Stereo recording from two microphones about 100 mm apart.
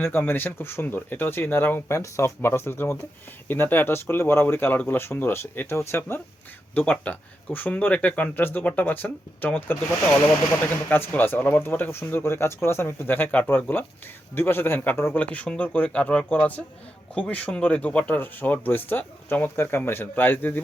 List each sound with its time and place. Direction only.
0.0 s speech: 20° left (ahead or behind)